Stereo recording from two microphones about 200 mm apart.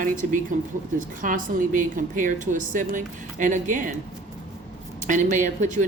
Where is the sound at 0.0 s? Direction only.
40° right (ahead or behind).